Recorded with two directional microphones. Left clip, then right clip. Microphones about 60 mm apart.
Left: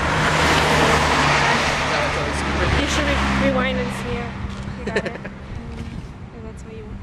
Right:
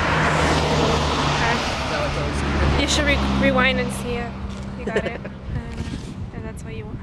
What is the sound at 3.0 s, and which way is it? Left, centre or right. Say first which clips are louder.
Speech: even; left.